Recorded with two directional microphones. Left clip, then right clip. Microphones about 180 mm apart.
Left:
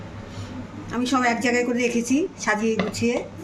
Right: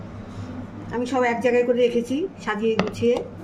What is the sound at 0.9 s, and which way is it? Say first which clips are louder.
Speech: even; 10° left (ahead or behind).